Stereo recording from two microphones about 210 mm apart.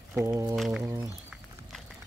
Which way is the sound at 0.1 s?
15° right (ahead or behind).